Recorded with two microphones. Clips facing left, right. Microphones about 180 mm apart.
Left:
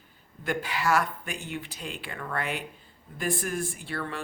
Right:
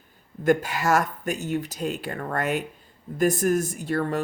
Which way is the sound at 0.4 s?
45° right (ahead or behind).